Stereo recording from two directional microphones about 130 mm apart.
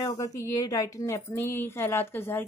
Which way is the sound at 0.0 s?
25° left (ahead or behind).